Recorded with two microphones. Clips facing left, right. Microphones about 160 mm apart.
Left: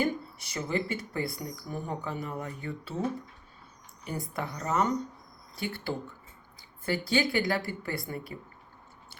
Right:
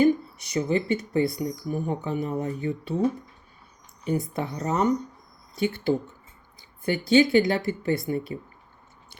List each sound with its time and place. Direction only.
0.0 s speech: 20° right (ahead or behind)
4.0 s speech: 20° right (ahead or behind)